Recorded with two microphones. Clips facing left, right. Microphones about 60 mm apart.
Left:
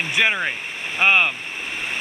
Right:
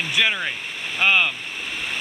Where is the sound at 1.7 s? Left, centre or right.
Centre.